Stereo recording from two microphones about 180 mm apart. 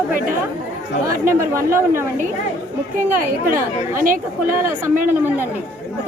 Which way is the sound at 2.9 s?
50° right (ahead or behind).